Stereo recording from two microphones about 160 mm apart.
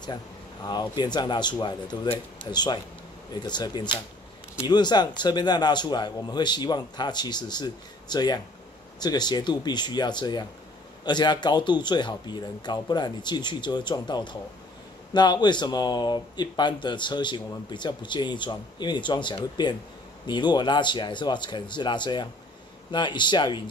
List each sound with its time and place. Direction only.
0.7 s speech: 25° left (ahead or behind)